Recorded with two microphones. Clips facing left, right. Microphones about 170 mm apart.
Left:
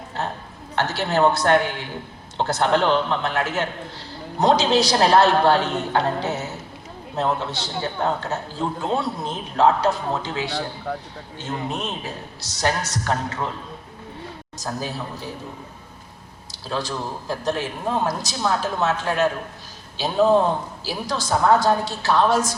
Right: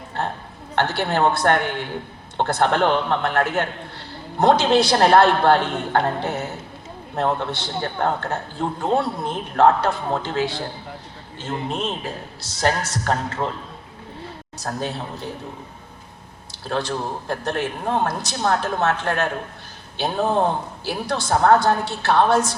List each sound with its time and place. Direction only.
0.8 s a man's voice: 55° right (ahead or behind)
11.7 s a man's voice: 25° right (ahead or behind)
12.9 s a man's voice: 55° right (ahead or behind)
14.8 s a man's voice: 25° right (ahead or behind)
16.6 s a man's voice: 60° right (ahead or behind)